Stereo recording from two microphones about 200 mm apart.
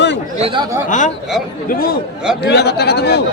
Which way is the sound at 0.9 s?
40° left (ahead or behind).